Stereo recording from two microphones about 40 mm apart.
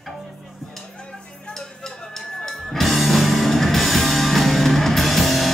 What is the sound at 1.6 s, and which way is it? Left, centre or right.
Music, centre.